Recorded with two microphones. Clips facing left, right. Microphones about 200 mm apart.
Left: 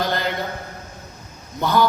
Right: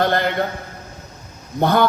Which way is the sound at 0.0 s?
55° right (ahead or behind).